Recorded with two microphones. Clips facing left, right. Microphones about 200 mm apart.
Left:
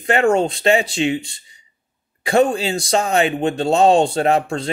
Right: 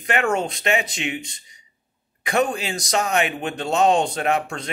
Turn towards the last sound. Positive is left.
turn(degrees=30)  # may be behind; listen again after turning